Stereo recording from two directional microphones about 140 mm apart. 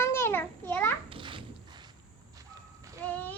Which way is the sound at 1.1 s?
35° right (ahead or behind).